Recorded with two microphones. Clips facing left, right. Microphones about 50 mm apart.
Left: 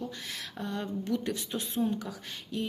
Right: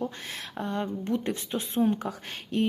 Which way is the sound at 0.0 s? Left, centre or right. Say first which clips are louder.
Right 4 dB; right.